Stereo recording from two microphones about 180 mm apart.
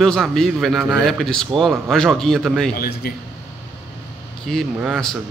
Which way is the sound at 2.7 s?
60° left (ahead or behind).